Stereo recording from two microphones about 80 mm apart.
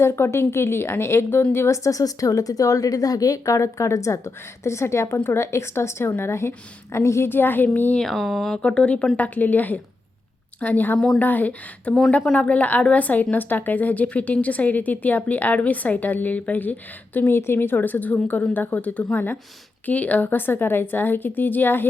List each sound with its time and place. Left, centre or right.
0.0 s speech: left
8.1 s speech: centre
8.5 s a woman's voice: centre
10.9 s a woman's voice: centre
11.2 s a woman's voice: left